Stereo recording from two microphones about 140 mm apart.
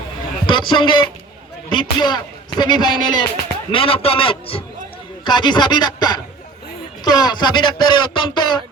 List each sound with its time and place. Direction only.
0.4 s a man's voice: 35° left (ahead or behind)